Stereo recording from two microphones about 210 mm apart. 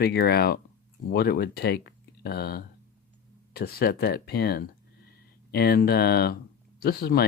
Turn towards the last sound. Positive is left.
turn(degrees=45)  # may be behind; listen again after turning